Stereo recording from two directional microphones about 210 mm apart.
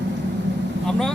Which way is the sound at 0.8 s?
Centre (ahead or behind).